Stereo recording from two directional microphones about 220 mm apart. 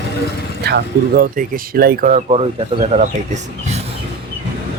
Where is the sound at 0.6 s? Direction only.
45° right (ahead or behind).